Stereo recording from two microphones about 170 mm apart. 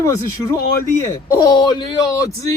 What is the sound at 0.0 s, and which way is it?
A man's voice, 20° left (ahead or behind).